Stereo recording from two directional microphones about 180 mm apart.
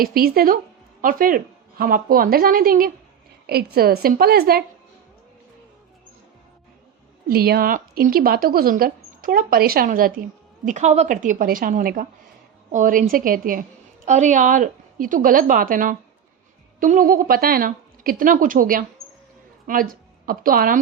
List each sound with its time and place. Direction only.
0.0 s a woman's voice: 55° right (ahead or behind)
7.3 s speech: 60° right (ahead or behind)
10.7 s a woman's voice: 40° right (ahead or behind)